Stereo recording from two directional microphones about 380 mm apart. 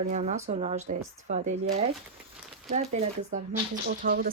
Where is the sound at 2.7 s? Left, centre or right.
Centre.